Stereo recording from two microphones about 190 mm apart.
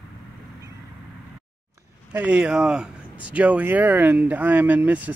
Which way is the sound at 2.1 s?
5° right (ahead or behind).